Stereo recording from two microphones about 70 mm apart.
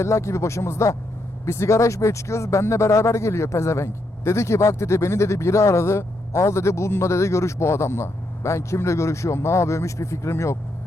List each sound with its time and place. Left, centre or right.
0.0 s speech: left